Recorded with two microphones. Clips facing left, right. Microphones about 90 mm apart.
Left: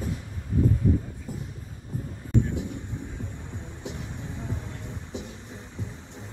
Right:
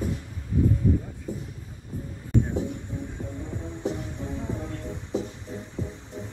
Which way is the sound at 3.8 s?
40° right (ahead or behind).